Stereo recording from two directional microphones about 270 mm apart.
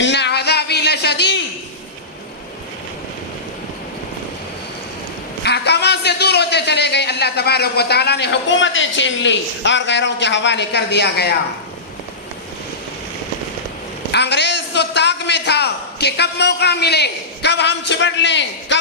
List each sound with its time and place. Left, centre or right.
0.0 s a sound: left
5.4 s a man's voice: left
14.1 s a man's voice: left